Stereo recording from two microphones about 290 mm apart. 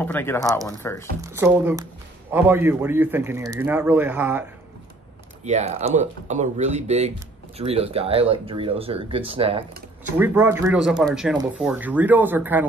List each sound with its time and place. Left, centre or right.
0.0 s speech: centre
1.2 s a man's voice: centre
5.4 s speech: right
10.1 s speech: centre